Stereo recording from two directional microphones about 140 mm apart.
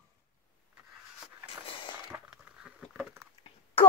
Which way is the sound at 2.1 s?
10° right (ahead or behind).